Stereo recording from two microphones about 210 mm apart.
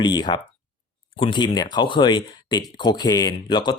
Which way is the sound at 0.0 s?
20° left (ahead or behind).